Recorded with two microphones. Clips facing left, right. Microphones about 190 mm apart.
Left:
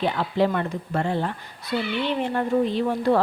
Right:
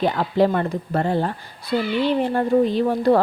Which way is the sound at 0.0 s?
40° right (ahead or behind).